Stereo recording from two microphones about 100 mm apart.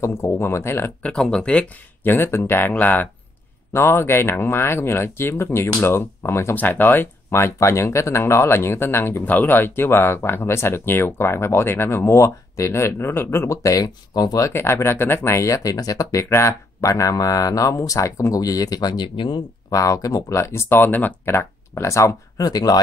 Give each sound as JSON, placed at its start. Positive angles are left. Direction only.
{"t": 0.0, "sound": "speech", "side_deg": 25}
{"t": 1.0, "sound": "speech", "side_deg": 10}
{"t": 14.5, "sound": "speech", "side_deg": 25}
{"t": 19.7, "sound": "speech", "side_deg": 35}